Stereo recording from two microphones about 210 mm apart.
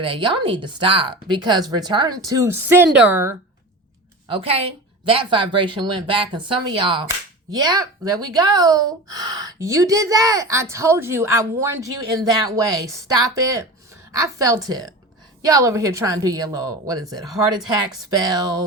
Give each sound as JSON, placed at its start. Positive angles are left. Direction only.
{"t": 0.0, "sound": "speech", "side_deg": -25}
{"t": 4.3, "sound": "a woman's voice", "side_deg": -25}